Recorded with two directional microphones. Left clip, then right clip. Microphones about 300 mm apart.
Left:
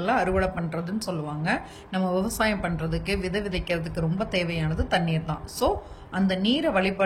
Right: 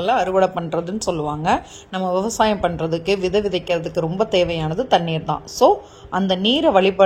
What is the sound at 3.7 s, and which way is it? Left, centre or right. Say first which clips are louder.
Speech: right 8 dB; right.